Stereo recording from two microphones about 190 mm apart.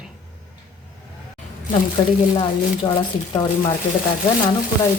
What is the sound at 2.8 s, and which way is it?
Speech, 20° left (ahead or behind).